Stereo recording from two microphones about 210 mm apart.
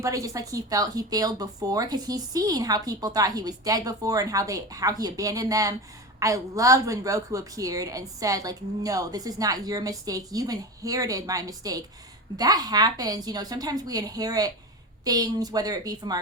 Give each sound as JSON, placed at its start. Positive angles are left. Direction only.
{"t": 0.0, "sound": "speech", "side_deg": -15}